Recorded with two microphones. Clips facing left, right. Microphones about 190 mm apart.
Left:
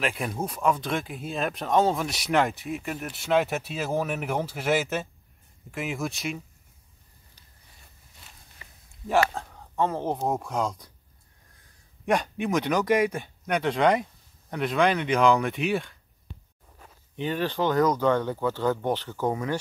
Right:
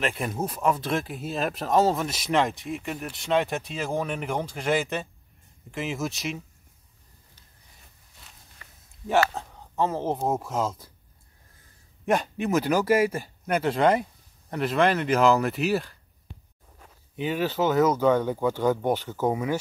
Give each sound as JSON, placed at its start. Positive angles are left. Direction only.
{"t": 0.0, "sound": "speech", "side_deg": 0}
{"t": 8.6, "sound": "a sound", "side_deg": 15}
{"t": 9.3, "sound": "speech", "side_deg": 0}
{"t": 12.1, "sound": "speech", "side_deg": 0}
{"t": 17.1, "sound": "speech", "side_deg": -10}